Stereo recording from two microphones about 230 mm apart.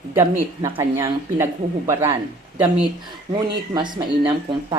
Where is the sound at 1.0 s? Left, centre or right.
Centre.